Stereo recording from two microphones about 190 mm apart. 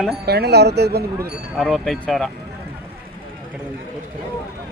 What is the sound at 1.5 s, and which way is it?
Speech, centre (ahead or behind).